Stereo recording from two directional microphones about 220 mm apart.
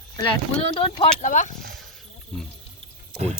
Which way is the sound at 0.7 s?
25° left (ahead or behind).